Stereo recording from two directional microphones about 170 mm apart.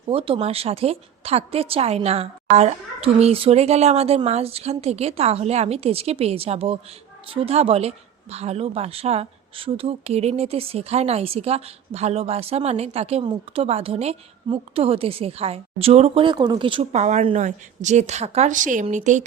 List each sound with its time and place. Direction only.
0.1 s a woman's voice: 30° right (ahead or behind)
16.9 s a woman's voice: 40° right (ahead or behind)